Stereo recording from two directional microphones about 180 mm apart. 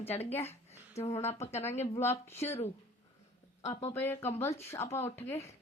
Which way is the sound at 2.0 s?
15° left (ahead or behind).